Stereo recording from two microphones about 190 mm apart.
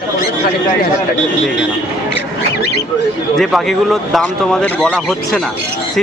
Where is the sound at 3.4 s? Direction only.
Centre (ahead or behind).